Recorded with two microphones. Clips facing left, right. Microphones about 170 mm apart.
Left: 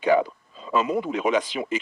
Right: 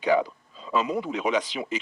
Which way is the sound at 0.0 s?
55° left (ahead or behind).